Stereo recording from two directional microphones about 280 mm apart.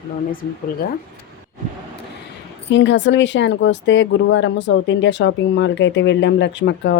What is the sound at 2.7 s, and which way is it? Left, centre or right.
Speech, left.